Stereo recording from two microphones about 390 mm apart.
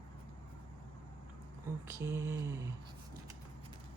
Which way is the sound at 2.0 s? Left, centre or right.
Centre.